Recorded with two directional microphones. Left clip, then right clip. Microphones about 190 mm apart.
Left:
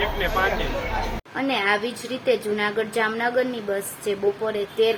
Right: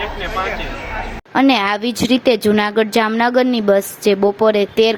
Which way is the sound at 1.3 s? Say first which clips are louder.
Right 9 dB; 45° right (ahead or behind).